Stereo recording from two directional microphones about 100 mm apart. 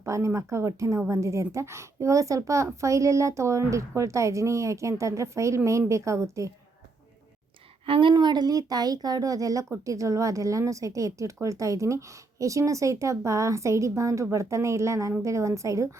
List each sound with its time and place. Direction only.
0.0 s speech: 30° right (ahead or behind)
7.9 s a woman's voice: 55° right (ahead or behind)
8.1 s speech: 45° right (ahead or behind)